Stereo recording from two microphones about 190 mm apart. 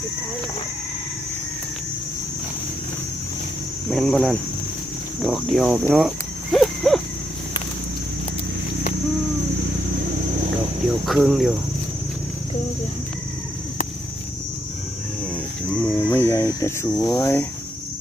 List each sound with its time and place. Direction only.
3.8 s speech: 5° left (ahead or behind)
5.9 s cricket: centre (ahead or behind)
11.0 s speech: centre (ahead or behind)
15.7 s speech: 10° left (ahead or behind)